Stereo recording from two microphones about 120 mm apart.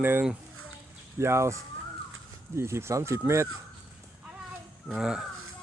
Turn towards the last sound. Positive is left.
turn(degrees=-5)  # may be behind; listen again after turning